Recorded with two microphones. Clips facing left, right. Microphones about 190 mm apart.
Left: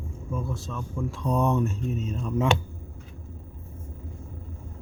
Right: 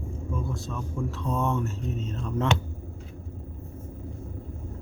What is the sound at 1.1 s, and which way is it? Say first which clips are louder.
Speech: left 4 dB; 15° left (ahead or behind).